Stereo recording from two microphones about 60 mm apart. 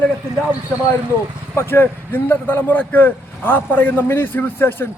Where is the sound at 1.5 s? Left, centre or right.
Left.